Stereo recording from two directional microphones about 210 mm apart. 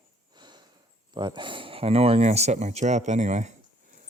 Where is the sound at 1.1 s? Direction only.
20° right (ahead or behind).